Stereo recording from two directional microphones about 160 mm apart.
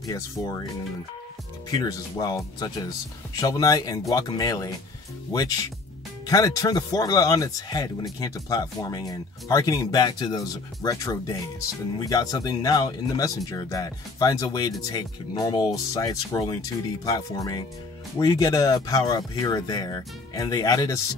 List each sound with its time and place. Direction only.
0.0 s speech: 20° left (ahead or behind)
1.7 s speech: 25° left (ahead or behind)